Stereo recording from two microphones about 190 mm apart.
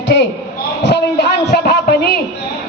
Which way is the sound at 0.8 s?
60° left (ahead or behind).